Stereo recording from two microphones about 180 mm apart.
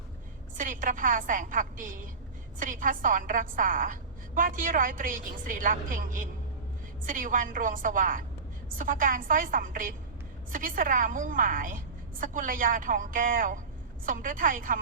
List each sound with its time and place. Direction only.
0.5 s a woman's voice: 45° right (ahead or behind)